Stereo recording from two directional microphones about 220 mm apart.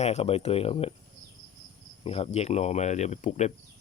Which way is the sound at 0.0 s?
30° left (ahead or behind).